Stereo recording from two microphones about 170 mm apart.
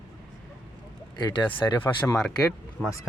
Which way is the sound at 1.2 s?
25° left (ahead or behind).